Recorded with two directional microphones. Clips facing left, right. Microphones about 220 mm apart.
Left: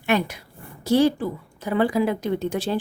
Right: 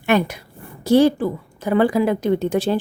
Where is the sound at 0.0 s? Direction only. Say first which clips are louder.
Right 4 dB; 55° right (ahead or behind).